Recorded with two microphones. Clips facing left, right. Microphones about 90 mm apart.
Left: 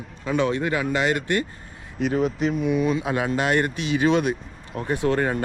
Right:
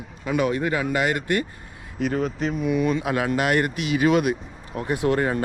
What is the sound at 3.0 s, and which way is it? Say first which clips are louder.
Speech: right 1 dB; 25° left (ahead or behind).